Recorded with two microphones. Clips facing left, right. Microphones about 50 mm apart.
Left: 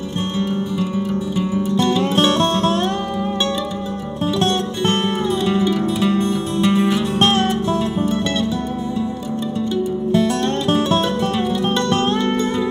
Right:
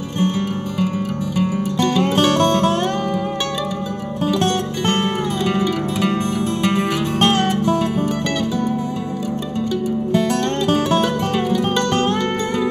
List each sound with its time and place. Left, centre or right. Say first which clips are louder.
1.4 s music: right 3 dB; right
6.0 s music: left 1 dB; right